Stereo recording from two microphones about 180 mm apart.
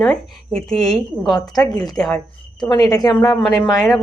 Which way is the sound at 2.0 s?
Centre (ahead or behind).